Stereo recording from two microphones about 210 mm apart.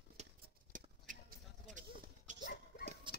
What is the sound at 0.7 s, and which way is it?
Horse, 40° right (ahead or behind).